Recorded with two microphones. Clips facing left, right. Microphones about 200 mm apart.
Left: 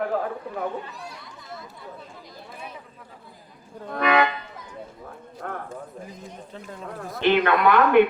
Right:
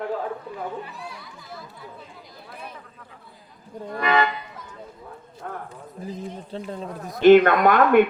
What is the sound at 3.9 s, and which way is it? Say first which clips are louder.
Speech: left 1 dB; 65° left (ahead or behind).